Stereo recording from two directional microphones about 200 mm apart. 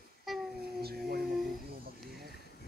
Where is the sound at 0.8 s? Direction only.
50° right (ahead or behind).